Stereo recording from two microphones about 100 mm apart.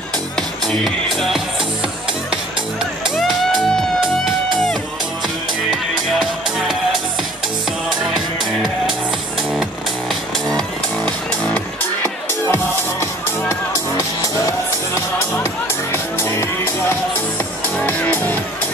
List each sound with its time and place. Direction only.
0.4 s music: 5° left (ahead or behind)
3.2 s music: 5° left (ahead or behind)
11.1 s music: 15° left (ahead or behind)
13.5 s music: 30° left (ahead or behind)
15.9 s music: 25° left (ahead or behind)
17.8 s music: 15° left (ahead or behind)